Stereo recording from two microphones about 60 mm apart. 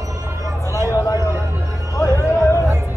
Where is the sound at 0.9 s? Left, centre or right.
Left.